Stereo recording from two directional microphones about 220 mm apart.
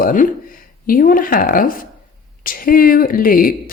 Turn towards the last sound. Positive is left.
turn(degrees=40)  # may be behind; listen again after turning